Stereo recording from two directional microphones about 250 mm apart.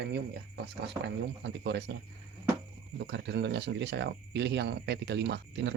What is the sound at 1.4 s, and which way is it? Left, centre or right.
Speech, right.